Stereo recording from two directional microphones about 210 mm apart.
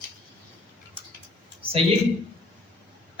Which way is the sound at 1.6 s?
25° right (ahead or behind).